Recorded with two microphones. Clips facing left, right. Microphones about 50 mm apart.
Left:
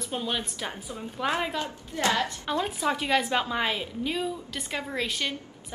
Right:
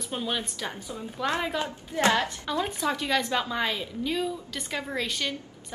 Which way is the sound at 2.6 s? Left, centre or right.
Centre.